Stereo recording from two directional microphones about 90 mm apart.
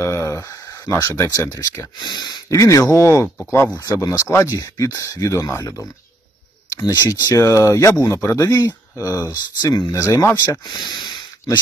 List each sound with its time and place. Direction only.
0.0 s a sound: 35° left (ahead or behind)
2.0 s speech: 55° left (ahead or behind)
2.5 s speech: 35° left (ahead or behind); by 7.3 s 50° left (ahead or behind)
7.3 s speech: 35° left (ahead or behind)
10.4 s speech: 50° left (ahead or behind)